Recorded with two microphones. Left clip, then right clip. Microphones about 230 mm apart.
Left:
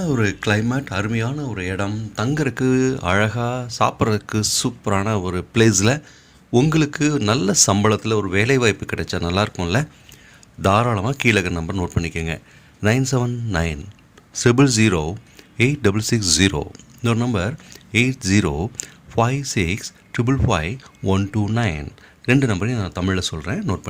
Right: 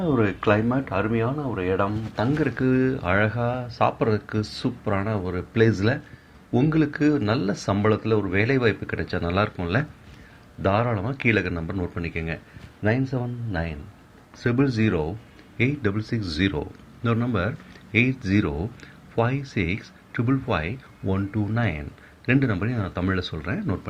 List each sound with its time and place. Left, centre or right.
0.2 s a man's voice: left